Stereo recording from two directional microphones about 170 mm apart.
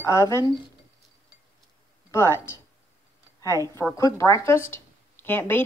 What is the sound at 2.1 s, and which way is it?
Speech, 15° left (ahead or behind).